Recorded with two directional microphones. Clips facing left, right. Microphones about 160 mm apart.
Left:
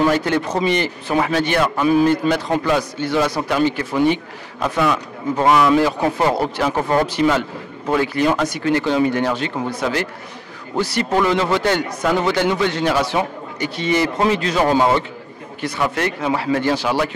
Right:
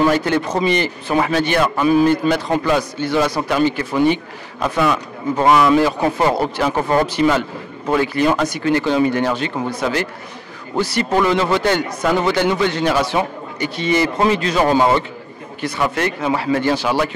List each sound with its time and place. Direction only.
0.1 s a man's voice: 15° right (ahead or behind)
10.8 s a man's voice: 10° right (ahead or behind)